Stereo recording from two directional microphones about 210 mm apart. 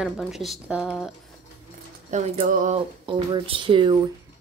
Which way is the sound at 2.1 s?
35° right (ahead or behind).